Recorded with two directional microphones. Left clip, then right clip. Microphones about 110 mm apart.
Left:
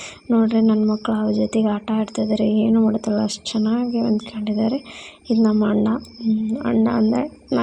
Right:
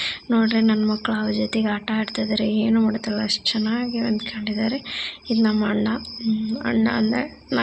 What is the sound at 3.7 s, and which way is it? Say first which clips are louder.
Speech: left 3 dB; 35° left (ahead or behind).